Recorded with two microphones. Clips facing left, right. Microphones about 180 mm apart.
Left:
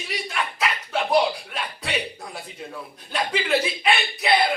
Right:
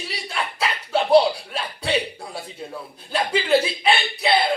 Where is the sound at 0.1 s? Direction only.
30° right (ahead or behind).